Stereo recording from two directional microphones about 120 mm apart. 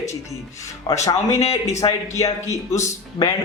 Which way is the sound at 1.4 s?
65° left (ahead or behind).